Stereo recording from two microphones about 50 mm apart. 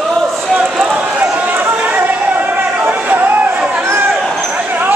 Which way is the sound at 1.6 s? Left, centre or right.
Right.